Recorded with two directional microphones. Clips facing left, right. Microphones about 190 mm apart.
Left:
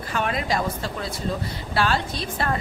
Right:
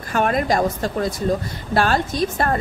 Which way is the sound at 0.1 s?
50° right (ahead or behind).